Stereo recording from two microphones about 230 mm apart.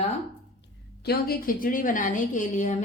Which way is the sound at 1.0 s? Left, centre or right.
Left.